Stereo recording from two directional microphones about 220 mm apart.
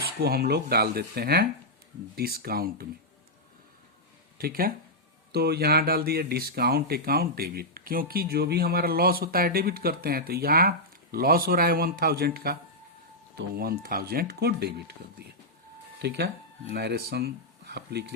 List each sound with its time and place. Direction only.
0.2 s speech: 45° right (ahead or behind)
4.4 s speech: 45° right (ahead or behind)